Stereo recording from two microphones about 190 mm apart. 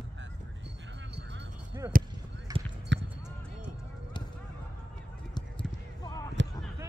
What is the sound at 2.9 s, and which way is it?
Basketball bounce, 75° right (ahead or behind).